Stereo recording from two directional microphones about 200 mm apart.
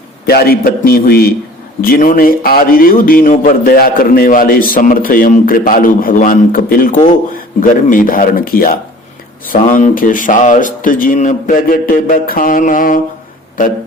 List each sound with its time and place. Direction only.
0.3 s a man's voice: 50° left (ahead or behind)